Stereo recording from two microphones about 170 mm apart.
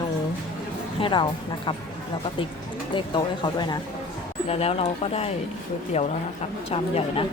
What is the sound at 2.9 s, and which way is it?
Speech, 25° left (ahead or behind).